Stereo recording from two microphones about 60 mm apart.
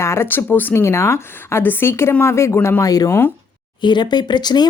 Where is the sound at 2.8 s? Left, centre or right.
Left.